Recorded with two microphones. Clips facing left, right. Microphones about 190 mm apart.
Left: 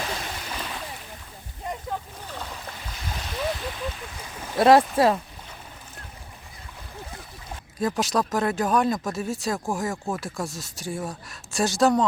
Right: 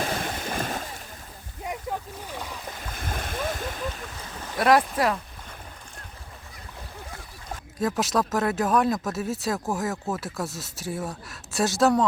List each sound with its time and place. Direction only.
0.1 s splash: 50° right (ahead or behind)
2.2 s boat: 10° right (ahead or behind)
2.9 s splash: 50° right (ahead or behind)
4.5 s speech: 25° left (ahead or behind)
7.8 s speech: centre (ahead or behind)